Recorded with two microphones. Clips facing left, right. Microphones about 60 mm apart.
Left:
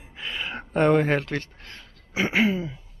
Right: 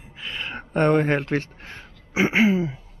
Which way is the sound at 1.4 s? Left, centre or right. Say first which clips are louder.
Right 5 dB; right.